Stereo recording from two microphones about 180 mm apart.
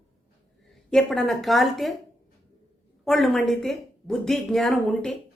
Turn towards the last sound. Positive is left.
turn(degrees=0)  # may be behind; listen again after turning